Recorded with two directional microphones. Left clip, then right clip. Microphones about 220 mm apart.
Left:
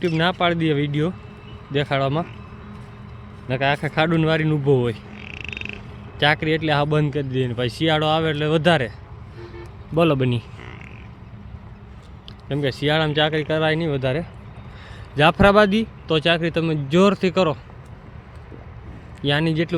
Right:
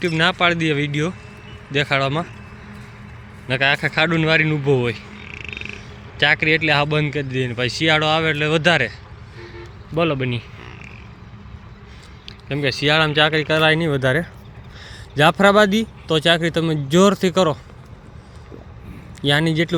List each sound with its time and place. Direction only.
0.0 s speech: 5° left (ahead or behind)
3.5 s speech: 5° left (ahead or behind)
5.2 s a sound: 20° left (ahead or behind)
6.1 s speech: 5° left (ahead or behind)
9.9 s a man's voice: 25° left (ahead or behind)
12.5 s speech: 5° left (ahead or behind)
19.2 s speech: 10° right (ahead or behind)